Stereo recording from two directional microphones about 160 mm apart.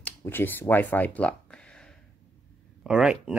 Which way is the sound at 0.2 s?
15° left (ahead or behind).